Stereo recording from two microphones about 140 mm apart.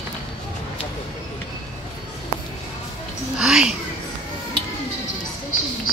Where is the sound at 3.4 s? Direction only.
5° right (ahead or behind).